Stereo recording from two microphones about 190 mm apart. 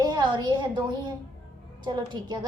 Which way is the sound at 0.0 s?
20° right (ahead or behind).